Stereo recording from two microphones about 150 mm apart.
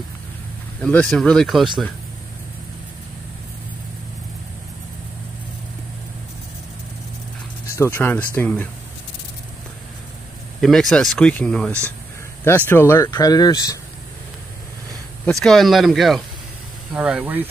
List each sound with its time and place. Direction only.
0.8 s speech: 5° left (ahead or behind)
7.6 s speech: 20° left (ahead or behind)
10.6 s speech: centre (ahead or behind)
12.4 s speech: 15° left (ahead or behind)
15.2 s speech: 5° left (ahead or behind); by 17.5 s 10° right (ahead or behind)